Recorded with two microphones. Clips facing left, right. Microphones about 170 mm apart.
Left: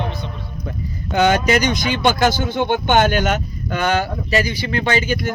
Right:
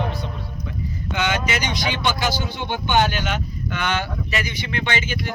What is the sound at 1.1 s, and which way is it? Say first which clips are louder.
Speech: left 9 dB; 40° left (ahead or behind).